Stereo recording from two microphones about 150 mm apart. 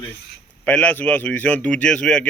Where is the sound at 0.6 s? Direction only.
10° left (ahead or behind).